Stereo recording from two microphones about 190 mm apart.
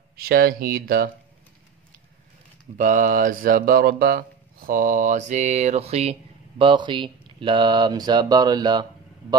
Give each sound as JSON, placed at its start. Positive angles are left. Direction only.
{"t": 0.1, "sound": "mantra", "side_deg": -55}
{"t": 2.8, "sound": "mantra", "side_deg": -45}
{"t": 6.6, "sound": "speech", "side_deg": -25}